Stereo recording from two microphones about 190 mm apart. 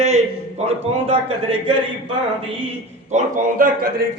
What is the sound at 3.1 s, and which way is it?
Speech, 45° right (ahead or behind).